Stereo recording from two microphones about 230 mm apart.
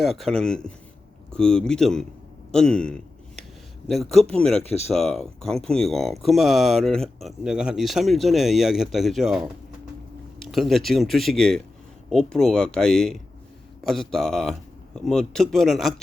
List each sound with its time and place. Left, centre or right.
0.0 s speech: centre
2.5 s a sound: centre
3.8 s speech: centre
4.6 s speech: left
4.9 s speech: centre
10.5 s speech: centre